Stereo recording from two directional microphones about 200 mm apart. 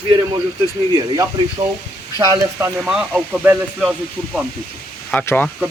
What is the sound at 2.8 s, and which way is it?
Speech, 5° right (ahead or behind).